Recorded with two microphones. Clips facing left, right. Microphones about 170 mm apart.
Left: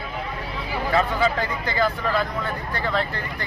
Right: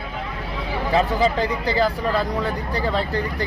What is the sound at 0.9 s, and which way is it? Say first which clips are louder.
A man's voice: right 2 dB; 35° right (ahead or behind).